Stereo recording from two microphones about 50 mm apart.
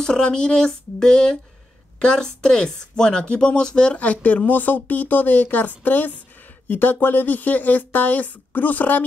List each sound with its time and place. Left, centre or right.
0.0 s speech: centre; by 9.0 s left